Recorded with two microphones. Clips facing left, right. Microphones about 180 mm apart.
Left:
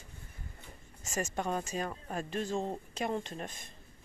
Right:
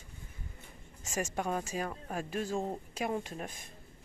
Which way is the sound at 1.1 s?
10° right (ahead or behind).